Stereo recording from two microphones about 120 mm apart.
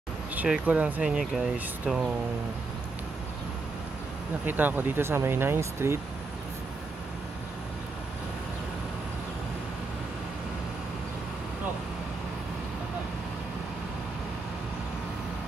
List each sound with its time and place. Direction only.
0.4 s speech: 10° right (ahead or behind)
4.5 s speech: 15° right (ahead or behind)